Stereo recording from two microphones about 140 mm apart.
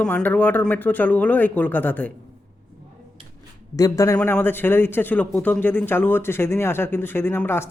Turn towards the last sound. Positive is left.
turn(degrees=15)  # may be behind; listen again after turning